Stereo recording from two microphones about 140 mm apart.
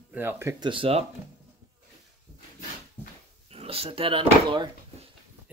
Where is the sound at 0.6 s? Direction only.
35° right (ahead or behind).